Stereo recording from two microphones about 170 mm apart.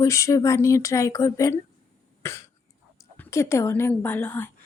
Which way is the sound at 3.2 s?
15° left (ahead or behind).